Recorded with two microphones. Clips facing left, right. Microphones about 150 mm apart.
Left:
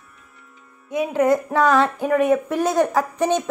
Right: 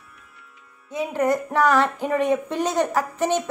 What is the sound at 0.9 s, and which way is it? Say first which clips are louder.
Speech: left 4 dB; 15° left (ahead or behind).